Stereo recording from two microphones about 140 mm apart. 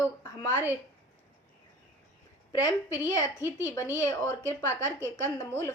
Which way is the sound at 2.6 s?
20° left (ahead or behind).